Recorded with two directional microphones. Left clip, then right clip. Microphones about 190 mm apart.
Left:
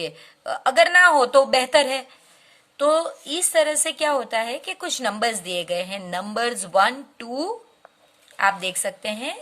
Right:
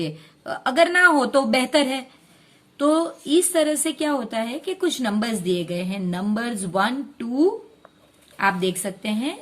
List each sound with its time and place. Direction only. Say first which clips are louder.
0.0 s a woman's voice: even; 25° left (ahead or behind)